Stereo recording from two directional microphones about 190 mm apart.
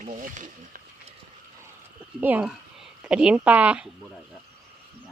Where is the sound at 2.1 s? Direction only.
10° right (ahead or behind).